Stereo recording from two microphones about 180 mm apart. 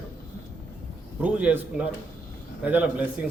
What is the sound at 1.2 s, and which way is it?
A man's voice, 10° right (ahead or behind).